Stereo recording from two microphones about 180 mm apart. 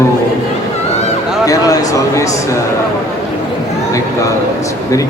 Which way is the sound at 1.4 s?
20° left (ahead or behind).